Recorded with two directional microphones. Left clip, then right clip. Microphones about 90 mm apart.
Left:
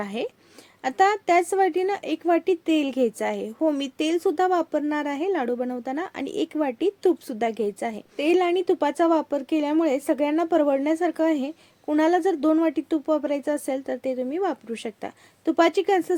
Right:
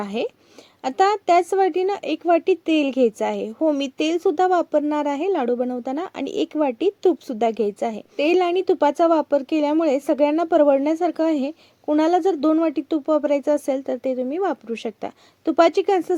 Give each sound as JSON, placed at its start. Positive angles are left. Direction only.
{"t": 0.0, "sound": "a woman's voice", "side_deg": -35}